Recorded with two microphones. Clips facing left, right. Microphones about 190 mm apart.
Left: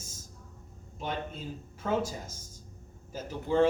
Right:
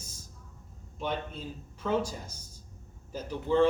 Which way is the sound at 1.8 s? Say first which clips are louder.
Right 1 dB; 50° left (ahead or behind).